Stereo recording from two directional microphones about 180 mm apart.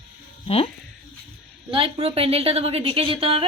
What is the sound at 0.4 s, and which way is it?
Speech, 30° left (ahead or behind).